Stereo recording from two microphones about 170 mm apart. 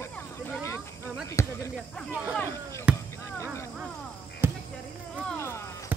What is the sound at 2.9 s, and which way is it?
Basketball bounce, 5° right (ahead or behind).